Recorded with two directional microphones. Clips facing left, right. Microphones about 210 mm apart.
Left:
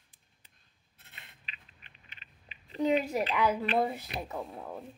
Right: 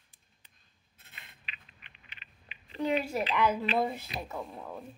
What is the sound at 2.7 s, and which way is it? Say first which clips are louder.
Speech: left 2 dB; 15° left (ahead or behind).